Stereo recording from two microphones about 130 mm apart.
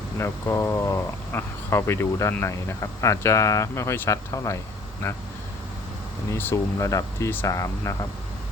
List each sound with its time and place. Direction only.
0.2 s speech: 20° left (ahead or behind)
6.3 s speech: 20° left (ahead or behind)